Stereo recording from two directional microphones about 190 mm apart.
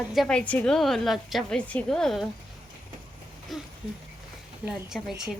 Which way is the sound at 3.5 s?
Centre (ahead or behind).